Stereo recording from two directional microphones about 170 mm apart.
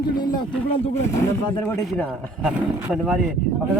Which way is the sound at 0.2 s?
25° left (ahead or behind).